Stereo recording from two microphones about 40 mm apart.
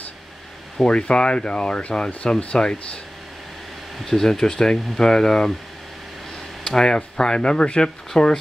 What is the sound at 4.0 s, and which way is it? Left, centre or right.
Speech, centre.